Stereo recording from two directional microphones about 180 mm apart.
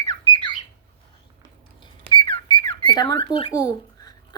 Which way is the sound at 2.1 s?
25° left (ahead or behind).